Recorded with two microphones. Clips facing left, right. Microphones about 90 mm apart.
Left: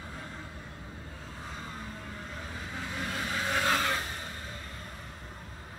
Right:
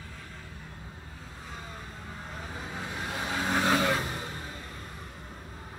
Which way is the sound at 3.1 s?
25° right (ahead or behind).